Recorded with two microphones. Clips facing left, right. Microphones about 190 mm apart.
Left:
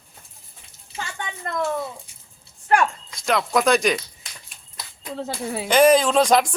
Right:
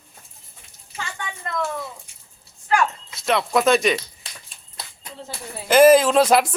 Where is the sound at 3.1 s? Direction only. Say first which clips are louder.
Right 2 dB; centre (ahead or behind).